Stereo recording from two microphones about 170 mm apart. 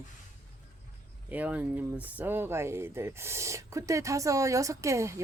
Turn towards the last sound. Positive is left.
turn(degrees=-15)  # may be behind; listen again after turning